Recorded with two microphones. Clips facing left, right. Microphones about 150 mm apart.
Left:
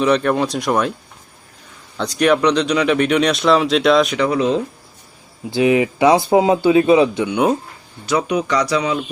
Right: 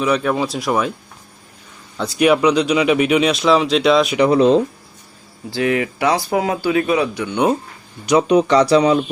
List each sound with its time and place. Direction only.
0.0 s speech: 5° right (ahead or behind)
2.0 s speech: 5° right (ahead or behind)
4.3 s speech: 35° right (ahead or behind)
5.5 s speech: 20° left (ahead or behind)
7.3 s speech: centre (ahead or behind)
8.3 s speech: 30° right (ahead or behind)